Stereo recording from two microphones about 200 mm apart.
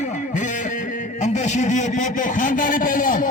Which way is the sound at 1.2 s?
35° left (ahead or behind).